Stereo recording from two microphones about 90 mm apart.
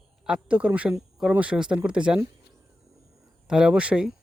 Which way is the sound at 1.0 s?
5° right (ahead or behind).